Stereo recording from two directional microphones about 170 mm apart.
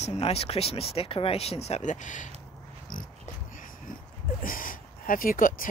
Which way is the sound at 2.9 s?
50° left (ahead or behind).